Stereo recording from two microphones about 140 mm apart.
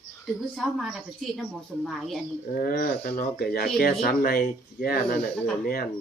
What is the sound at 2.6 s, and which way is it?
Speech, 90° left.